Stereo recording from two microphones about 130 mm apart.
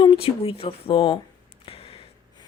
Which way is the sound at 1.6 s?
45° left (ahead or behind).